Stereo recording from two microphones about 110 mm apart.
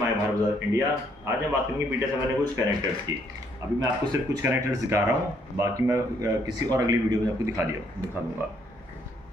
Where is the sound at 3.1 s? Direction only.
35° right (ahead or behind).